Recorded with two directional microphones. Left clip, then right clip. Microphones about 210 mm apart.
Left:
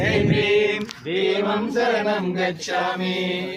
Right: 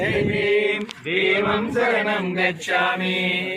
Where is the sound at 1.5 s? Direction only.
15° left (ahead or behind).